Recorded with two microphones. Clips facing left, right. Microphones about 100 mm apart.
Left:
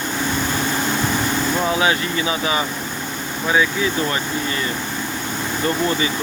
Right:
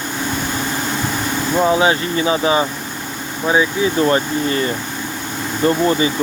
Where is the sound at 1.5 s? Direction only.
25° right (ahead or behind).